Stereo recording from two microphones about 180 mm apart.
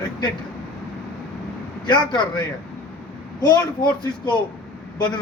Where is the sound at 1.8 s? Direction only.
25° left (ahead or behind).